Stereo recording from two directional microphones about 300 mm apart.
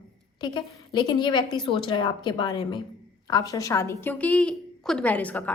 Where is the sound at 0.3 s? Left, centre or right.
Centre.